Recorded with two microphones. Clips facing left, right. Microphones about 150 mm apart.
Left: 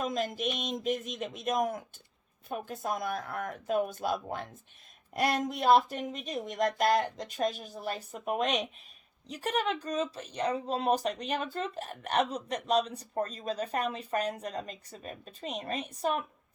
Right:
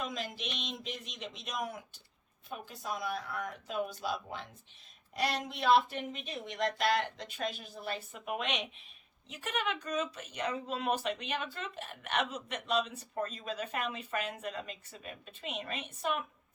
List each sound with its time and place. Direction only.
0.0 s speech: 45° left (ahead or behind)